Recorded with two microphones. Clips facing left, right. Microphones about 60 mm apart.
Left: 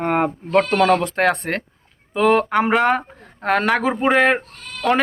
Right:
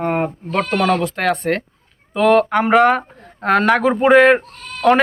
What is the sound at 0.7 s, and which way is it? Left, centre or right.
Speech, left.